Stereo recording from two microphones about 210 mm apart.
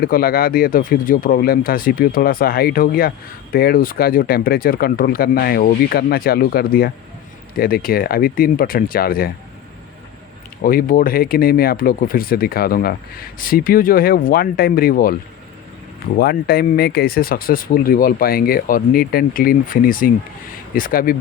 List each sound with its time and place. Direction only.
0.0 s speech: 45° left (ahead or behind)
10.6 s speech: 45° left (ahead or behind)
16.1 s speech: 50° left (ahead or behind)